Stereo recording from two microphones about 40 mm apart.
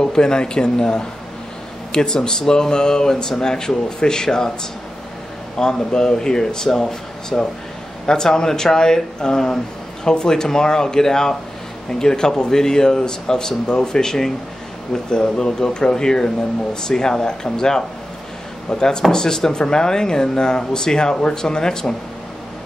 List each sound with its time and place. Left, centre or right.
0.0 s speech: centre
5.6 s speech: centre